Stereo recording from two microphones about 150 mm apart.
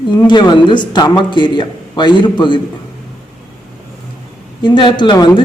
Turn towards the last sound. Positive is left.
turn(degrees=30)  # may be behind; listen again after turning